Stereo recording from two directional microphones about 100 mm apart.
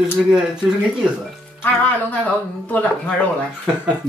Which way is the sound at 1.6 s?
15° left (ahead or behind).